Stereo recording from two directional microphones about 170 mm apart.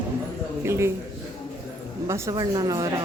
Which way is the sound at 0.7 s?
15° right (ahead or behind).